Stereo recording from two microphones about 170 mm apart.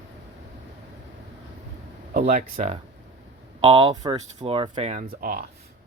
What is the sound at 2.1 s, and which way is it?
Speech, 55° right (ahead or behind).